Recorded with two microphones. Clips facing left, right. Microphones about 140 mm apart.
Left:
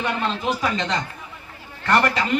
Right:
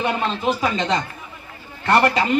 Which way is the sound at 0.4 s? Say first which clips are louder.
Right 5 dB; 20° right (ahead or behind).